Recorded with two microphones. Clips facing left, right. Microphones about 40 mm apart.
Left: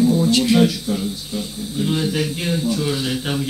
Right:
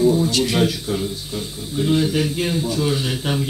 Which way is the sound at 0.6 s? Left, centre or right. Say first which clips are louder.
Left 2 dB; right.